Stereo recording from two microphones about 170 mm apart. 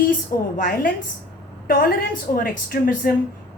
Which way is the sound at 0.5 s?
50° left (ahead or behind).